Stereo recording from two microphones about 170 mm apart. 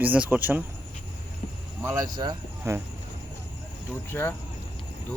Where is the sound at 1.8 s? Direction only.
15° right (ahead or behind).